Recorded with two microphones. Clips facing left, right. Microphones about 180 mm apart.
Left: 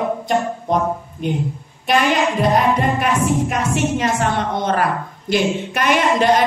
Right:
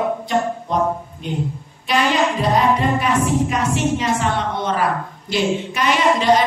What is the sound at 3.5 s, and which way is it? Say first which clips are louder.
Speech: even; 50° left (ahead or behind).